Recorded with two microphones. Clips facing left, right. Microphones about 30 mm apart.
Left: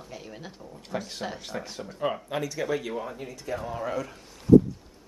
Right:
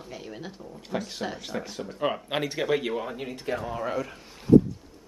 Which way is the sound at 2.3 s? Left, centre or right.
Right.